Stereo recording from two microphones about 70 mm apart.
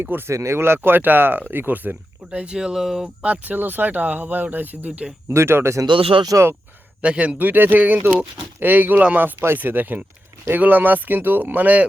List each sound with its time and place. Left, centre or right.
0.3 s speech: right; by 3.1 s centre
3.2 s speech: right
5.3 s speech: right
7.0 s speech: centre